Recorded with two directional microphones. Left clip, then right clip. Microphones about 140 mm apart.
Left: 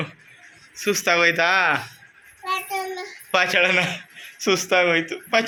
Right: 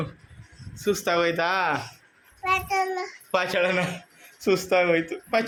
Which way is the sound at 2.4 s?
10° right (ahead or behind).